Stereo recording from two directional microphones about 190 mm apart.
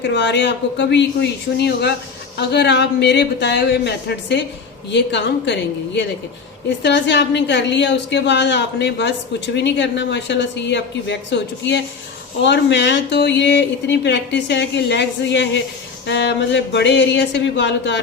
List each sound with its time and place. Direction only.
0.0 s speech: 70° left (ahead or behind)